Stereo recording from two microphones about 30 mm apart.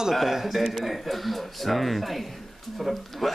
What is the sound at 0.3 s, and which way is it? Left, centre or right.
Speech, centre.